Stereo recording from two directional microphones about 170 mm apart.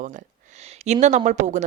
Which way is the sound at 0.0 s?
50° right (ahead or behind).